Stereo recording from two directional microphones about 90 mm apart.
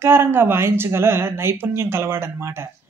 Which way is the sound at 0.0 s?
30° right (ahead or behind).